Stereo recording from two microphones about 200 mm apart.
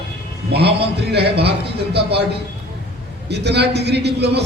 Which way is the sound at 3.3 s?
55° right (ahead or behind).